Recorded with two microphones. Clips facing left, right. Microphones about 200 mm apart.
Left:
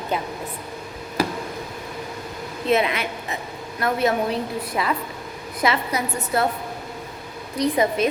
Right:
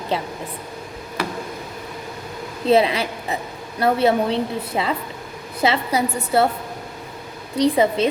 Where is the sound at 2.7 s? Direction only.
30° right (ahead or behind).